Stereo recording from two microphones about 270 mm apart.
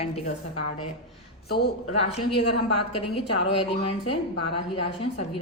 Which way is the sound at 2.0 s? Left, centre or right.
Left.